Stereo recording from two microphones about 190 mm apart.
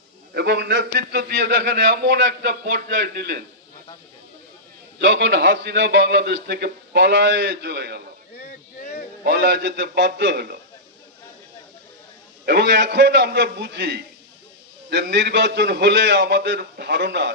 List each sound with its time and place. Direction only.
0.3 s a man's voice: 60° right (ahead or behind)
4.9 s a man's voice: 65° right (ahead or behind)
9.2 s a man's voice: 60° right (ahead or behind)
12.4 s a man's voice: 60° right (ahead or behind)